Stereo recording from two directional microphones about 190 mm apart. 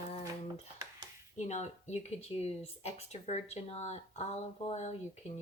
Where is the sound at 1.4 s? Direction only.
35° left (ahead or behind).